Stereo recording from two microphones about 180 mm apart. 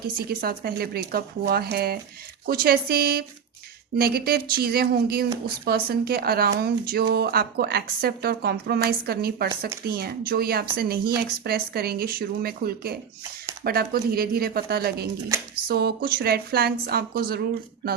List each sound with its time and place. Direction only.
0.3 s speech: 60° right (ahead or behind)